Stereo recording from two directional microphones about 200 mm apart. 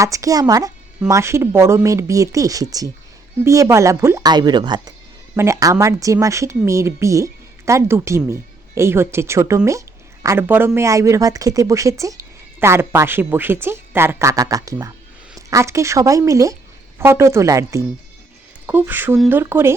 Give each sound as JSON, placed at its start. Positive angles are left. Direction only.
{"t": 0.0, "sound": "speech", "side_deg": -15}